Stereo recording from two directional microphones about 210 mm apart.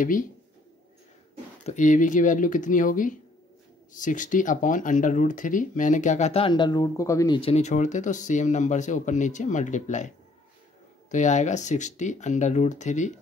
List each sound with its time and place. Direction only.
1.7 s speech: 35° left (ahead or behind)